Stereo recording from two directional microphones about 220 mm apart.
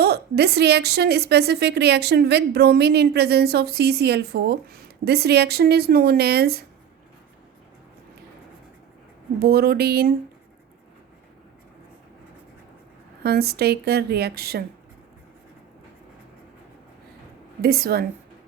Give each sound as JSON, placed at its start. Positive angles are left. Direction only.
{"t": 0.0, "sound": "a woman's voice", "side_deg": -45}
{"t": 9.4, "sound": "a woman's voice", "side_deg": -45}
{"t": 13.2, "sound": "a woman's voice", "side_deg": -45}
{"t": 17.6, "sound": "a woman's voice", "side_deg": -45}